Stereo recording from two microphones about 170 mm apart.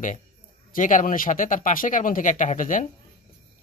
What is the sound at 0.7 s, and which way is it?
Speech, 50° left (ahead or behind).